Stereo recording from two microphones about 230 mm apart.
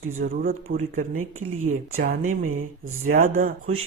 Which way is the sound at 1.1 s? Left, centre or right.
Right.